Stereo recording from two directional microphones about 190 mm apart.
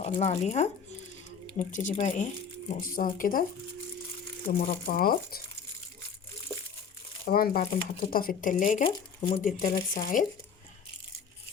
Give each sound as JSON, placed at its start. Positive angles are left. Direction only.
{"t": 0.0, "sound": "speech", "side_deg": 35}
{"t": 2.9, "sound": "speech", "side_deg": 45}
{"t": 4.4, "sound": "speech", "side_deg": 50}
{"t": 7.3, "sound": "speech", "side_deg": 50}
{"t": 8.8, "sound": "speech", "side_deg": 25}
{"t": 9.4, "sound": "speech", "side_deg": 45}